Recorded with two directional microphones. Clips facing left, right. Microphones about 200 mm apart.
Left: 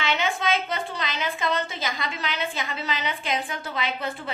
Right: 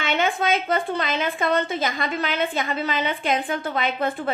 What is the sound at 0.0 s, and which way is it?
A woman's voice, 55° right (ahead or behind).